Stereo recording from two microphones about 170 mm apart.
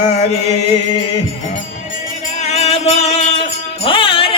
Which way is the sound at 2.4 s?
40° left (ahead or behind).